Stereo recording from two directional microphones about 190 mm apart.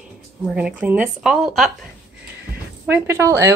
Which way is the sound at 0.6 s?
5° right (ahead or behind).